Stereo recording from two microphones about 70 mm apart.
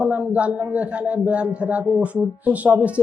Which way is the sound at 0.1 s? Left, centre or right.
Centre.